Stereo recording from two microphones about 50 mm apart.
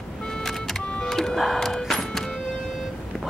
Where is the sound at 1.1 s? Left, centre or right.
Centre.